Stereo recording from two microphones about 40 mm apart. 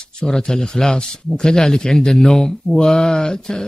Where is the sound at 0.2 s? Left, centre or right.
Centre.